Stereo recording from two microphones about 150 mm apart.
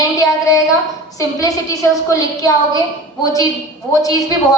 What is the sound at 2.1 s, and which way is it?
Speech, 25° left (ahead or behind).